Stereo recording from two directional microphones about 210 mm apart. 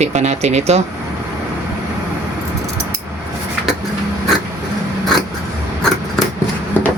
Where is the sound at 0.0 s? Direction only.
35° right (ahead or behind).